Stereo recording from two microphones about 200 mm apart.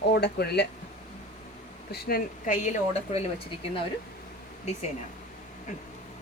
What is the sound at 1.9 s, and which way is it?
Speech, 50° left (ahead or behind).